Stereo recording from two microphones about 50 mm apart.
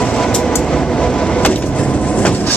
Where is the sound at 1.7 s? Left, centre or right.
Left.